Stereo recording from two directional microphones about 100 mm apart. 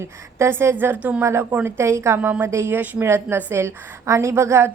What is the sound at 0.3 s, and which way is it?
A woman's voice, 25° right (ahead or behind).